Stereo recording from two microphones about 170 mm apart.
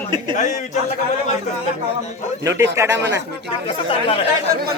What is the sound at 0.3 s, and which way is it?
Speech, 45° left (ahead or behind).